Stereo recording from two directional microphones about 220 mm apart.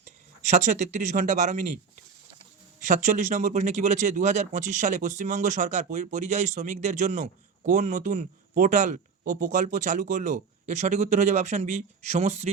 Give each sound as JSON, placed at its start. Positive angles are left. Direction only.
{"t": 0.4, "sound": "speech", "side_deg": -30}
{"t": 2.8, "sound": "speech", "side_deg": -35}